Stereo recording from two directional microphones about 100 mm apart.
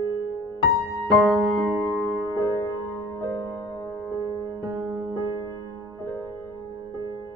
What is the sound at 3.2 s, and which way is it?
Music, 35° left (ahead or behind).